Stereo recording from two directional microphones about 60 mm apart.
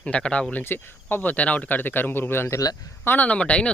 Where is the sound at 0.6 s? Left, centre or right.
Left.